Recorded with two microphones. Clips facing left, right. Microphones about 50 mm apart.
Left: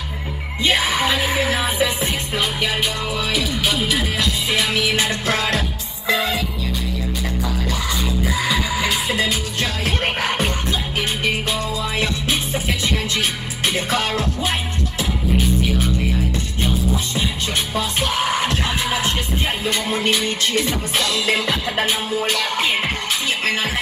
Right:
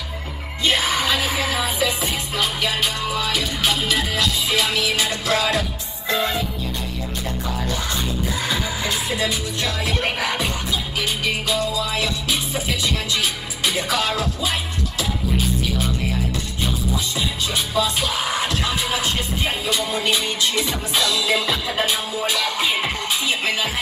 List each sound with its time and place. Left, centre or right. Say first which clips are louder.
0.7 s music: left 1 dB; centre
1.5 s music: left 2 dB; left
2.3 s music: left 1 dB; centre
4.2 s music: even; left
9.1 s music: left 2 dB; left
11.0 s music: left 2 dB; left
16.9 s music: left 2 dB; left
22.2 s music: right 1 dB; left